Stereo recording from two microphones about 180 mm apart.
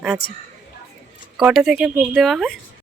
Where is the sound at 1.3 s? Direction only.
5° right (ahead or behind).